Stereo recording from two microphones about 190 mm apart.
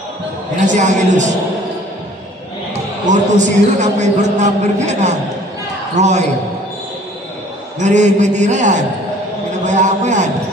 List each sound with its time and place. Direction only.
0.6 s a man's voice: 40° right (ahead or behind)
3.1 s a man's voice: 40° right (ahead or behind)
7.8 s a man's voice: 40° right (ahead or behind)